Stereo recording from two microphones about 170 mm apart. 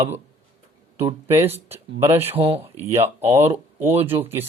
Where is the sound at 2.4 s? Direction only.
30° right (ahead or behind).